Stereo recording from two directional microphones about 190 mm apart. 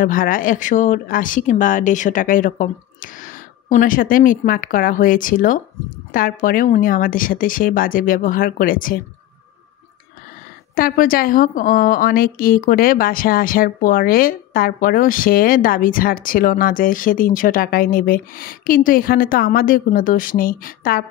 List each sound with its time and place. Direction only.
0.0 s a woman's voice: 45° left (ahead or behind)
10.7 s a woman's voice: 50° left (ahead or behind)